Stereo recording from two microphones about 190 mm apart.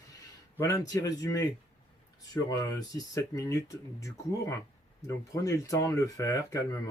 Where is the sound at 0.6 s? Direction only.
15° left (ahead or behind).